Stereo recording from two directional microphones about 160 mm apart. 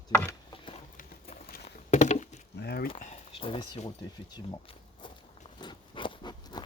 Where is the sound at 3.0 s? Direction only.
40° left (ahead or behind).